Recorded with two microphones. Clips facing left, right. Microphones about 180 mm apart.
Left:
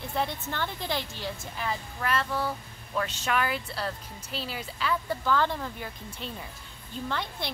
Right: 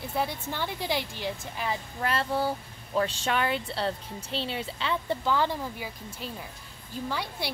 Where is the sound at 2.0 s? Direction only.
30° right (ahead or behind).